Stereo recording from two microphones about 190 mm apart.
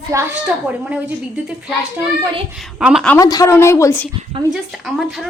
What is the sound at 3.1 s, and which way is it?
A woman's voice, 20° left (ahead or behind).